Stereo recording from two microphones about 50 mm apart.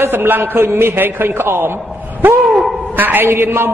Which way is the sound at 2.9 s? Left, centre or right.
Right.